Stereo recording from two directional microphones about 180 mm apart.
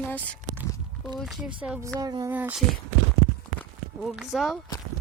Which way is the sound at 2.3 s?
10° right (ahead or behind).